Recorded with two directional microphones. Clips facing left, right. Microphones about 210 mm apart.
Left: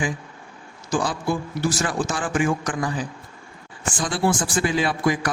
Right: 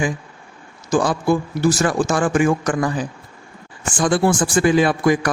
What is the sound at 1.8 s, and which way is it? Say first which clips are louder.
Speech: right 7 dB; 45° right (ahead or behind).